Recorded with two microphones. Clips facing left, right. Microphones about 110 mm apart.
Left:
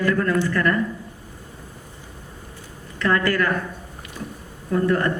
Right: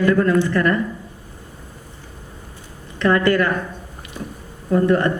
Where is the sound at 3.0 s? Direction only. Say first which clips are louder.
Right 4 dB; 20° right (ahead or behind).